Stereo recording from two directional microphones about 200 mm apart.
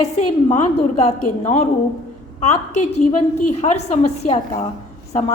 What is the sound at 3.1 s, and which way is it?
A woman's voice, 35° left (ahead or behind).